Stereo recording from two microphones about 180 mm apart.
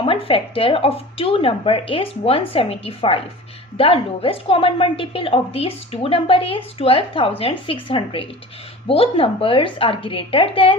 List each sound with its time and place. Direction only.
0.0 s a woman's voice: 30° left (ahead or behind)